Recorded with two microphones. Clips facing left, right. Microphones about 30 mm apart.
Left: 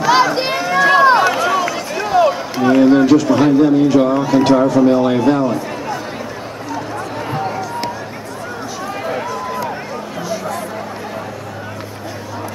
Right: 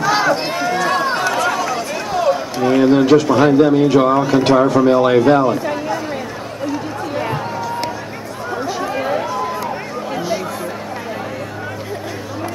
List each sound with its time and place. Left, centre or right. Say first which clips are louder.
0.1 s run: left 5 dB; centre
3.5 s speech: even; centre
6.7 s a sound: even; centre
7.3 s run: left 1 dB; centre
8.8 s run: even; centre